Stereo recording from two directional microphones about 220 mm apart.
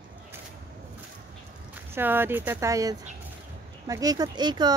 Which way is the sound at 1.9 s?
10° right (ahead or behind).